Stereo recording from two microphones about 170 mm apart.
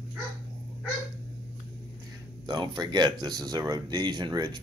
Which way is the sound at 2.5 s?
25° right (ahead or behind).